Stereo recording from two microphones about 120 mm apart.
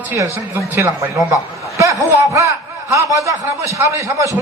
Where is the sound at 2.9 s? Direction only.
25° right (ahead or behind).